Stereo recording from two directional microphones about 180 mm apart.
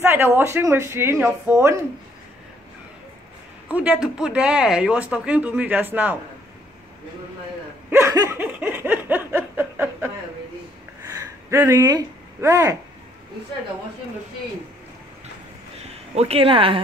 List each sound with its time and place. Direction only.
0.0 s speech: 15° right (ahead or behind)
3.7 s speech: 5° right (ahead or behind)
7.9 s a sound: 15° right (ahead or behind)
15.8 s speech: 35° right (ahead or behind)